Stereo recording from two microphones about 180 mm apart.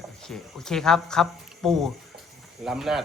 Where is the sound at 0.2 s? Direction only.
Centre (ahead or behind).